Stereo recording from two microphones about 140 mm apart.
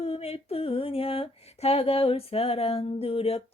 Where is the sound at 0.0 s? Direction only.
45° left (ahead or behind).